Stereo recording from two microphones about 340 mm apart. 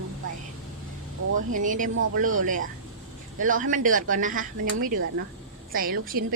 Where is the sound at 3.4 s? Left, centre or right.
Right.